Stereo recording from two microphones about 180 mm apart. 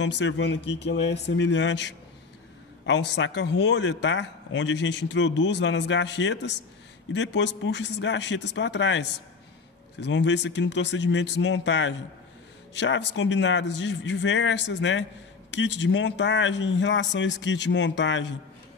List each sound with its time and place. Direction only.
0.0 s speech: 80° left